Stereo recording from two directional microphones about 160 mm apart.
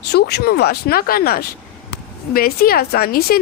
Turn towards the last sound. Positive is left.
turn(degrees=70)  # may be behind; listen again after turning